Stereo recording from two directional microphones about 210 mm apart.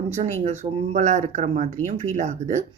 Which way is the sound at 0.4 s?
35° right (ahead or behind).